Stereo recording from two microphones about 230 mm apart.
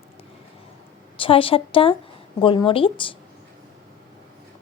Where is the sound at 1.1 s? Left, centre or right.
Left.